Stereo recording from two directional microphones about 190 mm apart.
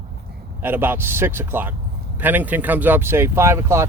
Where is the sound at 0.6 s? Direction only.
10° right (ahead or behind).